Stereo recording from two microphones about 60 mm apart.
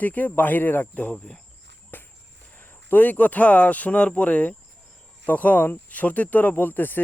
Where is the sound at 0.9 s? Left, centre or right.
Centre.